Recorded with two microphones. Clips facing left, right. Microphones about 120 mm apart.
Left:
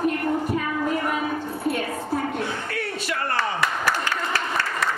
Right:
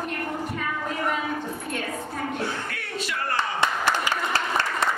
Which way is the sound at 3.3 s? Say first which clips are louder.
Right 1 dB; 25° right (ahead or behind).